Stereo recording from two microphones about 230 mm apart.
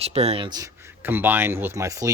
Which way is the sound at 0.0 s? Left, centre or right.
Right.